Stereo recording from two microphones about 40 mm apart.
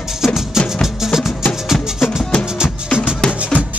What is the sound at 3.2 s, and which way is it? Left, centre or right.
Music, centre.